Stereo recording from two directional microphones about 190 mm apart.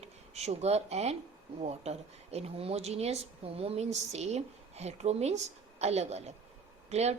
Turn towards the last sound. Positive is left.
turn(degrees=-35)  # may be behind; listen again after turning